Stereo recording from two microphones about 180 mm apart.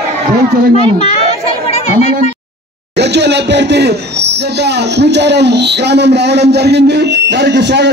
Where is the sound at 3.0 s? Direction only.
70° right (ahead or behind).